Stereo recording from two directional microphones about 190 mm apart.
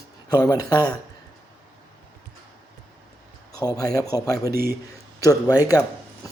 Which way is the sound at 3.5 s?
20° left (ahead or behind).